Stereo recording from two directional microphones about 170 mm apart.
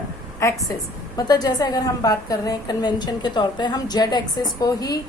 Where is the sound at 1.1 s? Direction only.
20° left (ahead or behind).